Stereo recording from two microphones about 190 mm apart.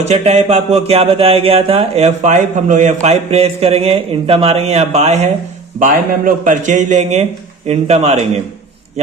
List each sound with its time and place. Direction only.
0.0 s speech: 35° right (ahead or behind)